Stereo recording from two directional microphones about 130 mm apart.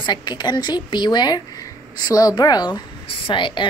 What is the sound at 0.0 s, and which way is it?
A woman's voice, 35° left (ahead or behind).